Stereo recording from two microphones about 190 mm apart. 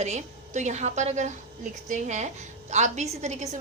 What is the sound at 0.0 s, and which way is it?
A woman's voice, 35° right (ahead or behind).